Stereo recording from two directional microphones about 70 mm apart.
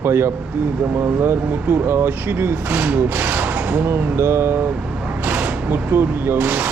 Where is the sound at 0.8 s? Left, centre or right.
Right.